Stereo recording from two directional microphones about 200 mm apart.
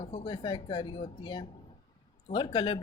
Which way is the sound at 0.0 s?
30° left (ahead or behind).